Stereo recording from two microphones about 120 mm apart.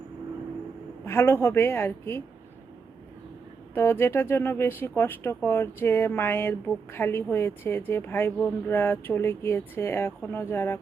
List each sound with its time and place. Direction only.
1.0 s a woman's voice: 20° left (ahead or behind)
3.8 s a woman's voice: 20° left (ahead or behind)